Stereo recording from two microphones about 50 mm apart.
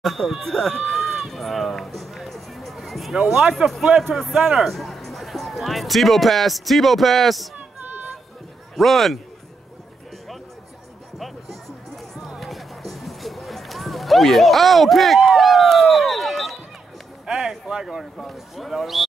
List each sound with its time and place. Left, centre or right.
0.0 s a sound: centre
3.6 s speech: right
4.1 s speech: centre
8.7 s speech: centre
12.4 s run: centre
17.3 s speech: centre
18.1 s speech: centre